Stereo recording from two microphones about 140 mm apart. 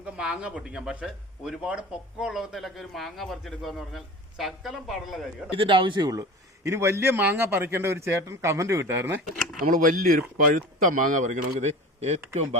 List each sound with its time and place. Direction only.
0.0 s speech: 10° right (ahead or behind)
5.5 s a man's voice: 35° right (ahead or behind); by 9.2 s 15° right (ahead or behind)
9.6 s speech: 70° right (ahead or behind); by 12.2 s 50° right (ahead or behind)